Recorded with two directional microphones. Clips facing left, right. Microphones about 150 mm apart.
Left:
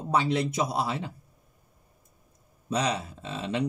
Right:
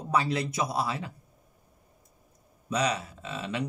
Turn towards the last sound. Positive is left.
turn(degrees=30)  # may be behind; listen again after turning